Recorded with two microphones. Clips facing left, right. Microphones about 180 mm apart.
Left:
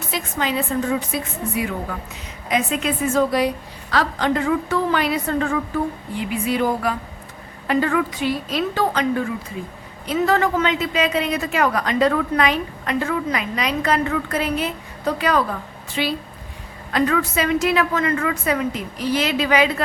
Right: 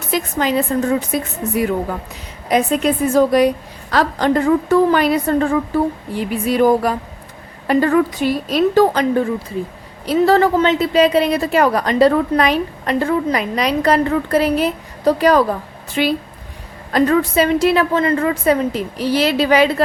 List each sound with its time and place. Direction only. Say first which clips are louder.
0.1 s a woman's voice: right 6 dB; 40° right (ahead or behind)
2.5 s a woman's voice: right 6 dB; 40° right (ahead or behind)
16.0 s a woman's voice: right 6 dB; 55° right (ahead or behind)
16.9 s a woman's voice: right 5 dB; 35° right (ahead or behind)